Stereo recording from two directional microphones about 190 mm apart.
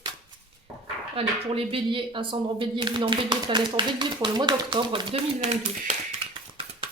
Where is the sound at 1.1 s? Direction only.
30° right (ahead or behind).